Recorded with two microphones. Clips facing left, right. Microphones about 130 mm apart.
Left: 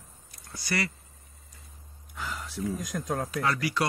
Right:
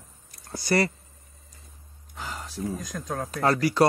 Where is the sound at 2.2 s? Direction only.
40° right (ahead or behind).